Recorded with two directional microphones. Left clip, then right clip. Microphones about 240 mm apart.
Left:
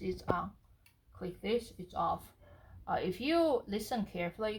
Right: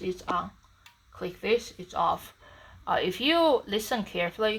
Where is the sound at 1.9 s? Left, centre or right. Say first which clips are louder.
Right 8 dB; centre.